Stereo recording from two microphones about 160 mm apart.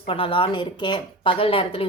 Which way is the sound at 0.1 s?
35° left (ahead or behind).